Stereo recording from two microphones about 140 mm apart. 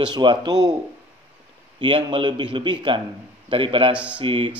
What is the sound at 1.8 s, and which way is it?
A man's voice, 35° right (ahead or behind).